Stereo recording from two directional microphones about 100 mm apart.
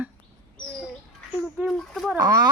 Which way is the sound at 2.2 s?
40° right (ahead or behind).